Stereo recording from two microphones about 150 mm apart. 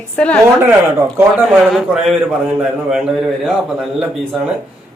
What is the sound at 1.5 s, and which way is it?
Speech, centre (ahead or behind).